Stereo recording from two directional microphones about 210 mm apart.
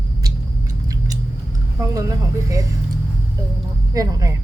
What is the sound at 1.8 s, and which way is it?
Speech, 15° right (ahead or behind).